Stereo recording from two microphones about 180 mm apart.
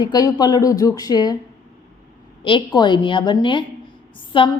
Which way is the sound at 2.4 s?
30° left (ahead or behind).